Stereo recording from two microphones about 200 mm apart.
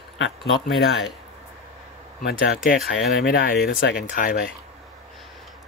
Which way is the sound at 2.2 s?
55° left (ahead or behind).